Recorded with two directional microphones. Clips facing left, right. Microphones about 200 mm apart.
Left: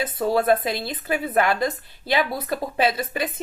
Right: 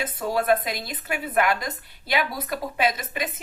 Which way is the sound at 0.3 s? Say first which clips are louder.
Left 2 dB; 30° left (ahead or behind).